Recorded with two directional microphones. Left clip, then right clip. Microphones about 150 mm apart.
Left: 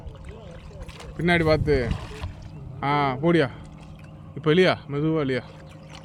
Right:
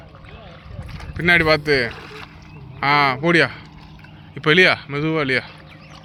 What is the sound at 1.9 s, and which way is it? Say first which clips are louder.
Rowboat: right 3 dB; 55° left (ahead or behind).